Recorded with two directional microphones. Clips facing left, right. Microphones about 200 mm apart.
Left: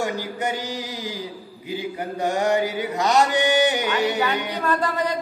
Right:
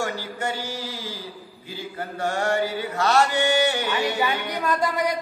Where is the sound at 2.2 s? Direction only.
15° left (ahead or behind).